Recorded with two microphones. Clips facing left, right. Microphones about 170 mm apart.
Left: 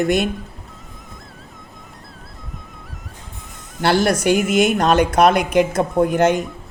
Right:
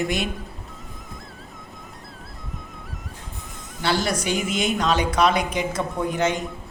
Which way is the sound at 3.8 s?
60° left (ahead or behind).